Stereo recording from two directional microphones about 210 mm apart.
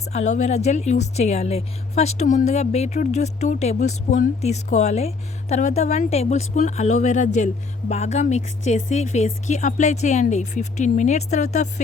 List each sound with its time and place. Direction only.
0.1 s speech: 35° left (ahead or behind)